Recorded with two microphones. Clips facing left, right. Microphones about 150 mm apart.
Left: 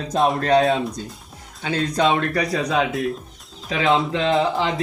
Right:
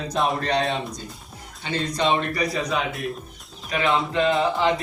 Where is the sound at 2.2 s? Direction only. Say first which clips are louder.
Left 3 dB; 75° left (ahead or behind); by 3.8 s 90° left.